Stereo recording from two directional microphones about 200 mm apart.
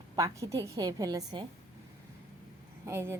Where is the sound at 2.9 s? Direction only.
10° right (ahead or behind).